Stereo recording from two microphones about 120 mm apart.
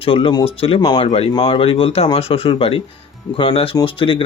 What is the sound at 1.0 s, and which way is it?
Speech, 60° left (ahead or behind).